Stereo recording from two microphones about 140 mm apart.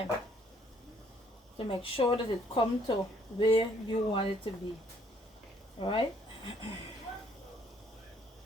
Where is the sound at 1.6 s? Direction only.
40° left (ahead or behind).